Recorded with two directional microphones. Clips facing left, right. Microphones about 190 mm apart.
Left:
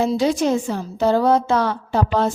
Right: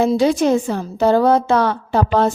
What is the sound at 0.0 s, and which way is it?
A woman's voice, 60° right (ahead or behind).